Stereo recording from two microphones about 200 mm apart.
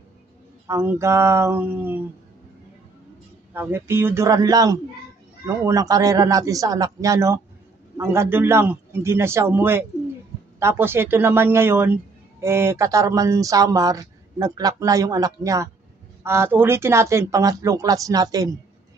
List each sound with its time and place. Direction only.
0.7 s speech: 15° right (ahead or behind)
3.5 s speech: 10° right (ahead or behind)